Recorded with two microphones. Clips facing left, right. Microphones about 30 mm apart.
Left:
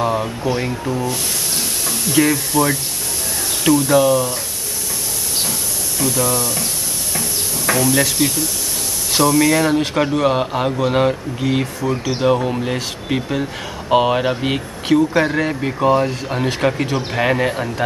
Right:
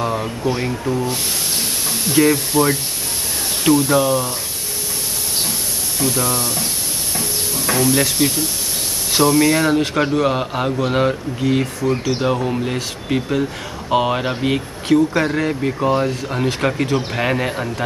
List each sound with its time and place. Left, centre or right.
0.0 s speech: centre
2.1 s speech: centre
2.5 s speech: centre
6.0 s speech: centre
7.7 s speech: centre
9.4 s speech: centre